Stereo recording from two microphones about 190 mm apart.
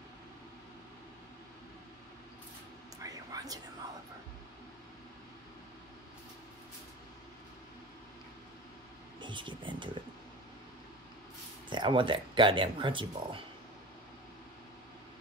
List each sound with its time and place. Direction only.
3.0 s a sound: 20° right (ahead or behind)
9.2 s speech: 25° right (ahead or behind)
11.7 s speech: 25° right (ahead or behind)